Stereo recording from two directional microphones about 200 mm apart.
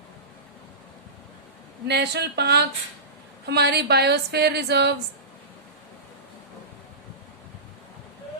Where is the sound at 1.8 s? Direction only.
55° right (ahead or behind).